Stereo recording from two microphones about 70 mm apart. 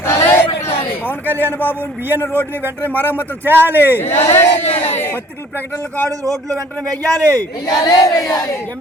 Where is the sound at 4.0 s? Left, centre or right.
Left.